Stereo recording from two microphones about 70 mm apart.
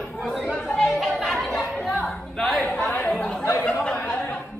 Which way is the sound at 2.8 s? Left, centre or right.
Centre.